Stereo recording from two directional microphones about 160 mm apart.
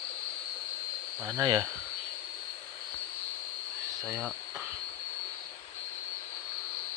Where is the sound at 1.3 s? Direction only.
25° right (ahead or behind).